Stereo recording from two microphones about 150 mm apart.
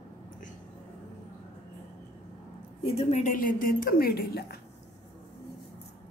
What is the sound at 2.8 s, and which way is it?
A woman's voice, 45° left (ahead or behind).